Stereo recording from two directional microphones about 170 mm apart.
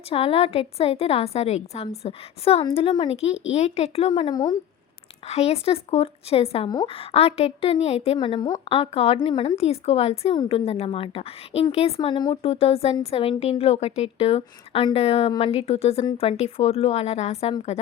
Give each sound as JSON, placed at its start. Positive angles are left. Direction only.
{"t": 0.1, "sound": "a woman's voice", "side_deg": 35}
{"t": 4.3, "sound": "speech", "side_deg": 25}
{"t": 5.3, "sound": "a woman's voice", "side_deg": 40}